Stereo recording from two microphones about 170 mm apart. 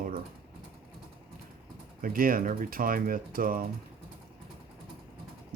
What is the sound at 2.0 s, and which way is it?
Speech, 55° right (ahead or behind).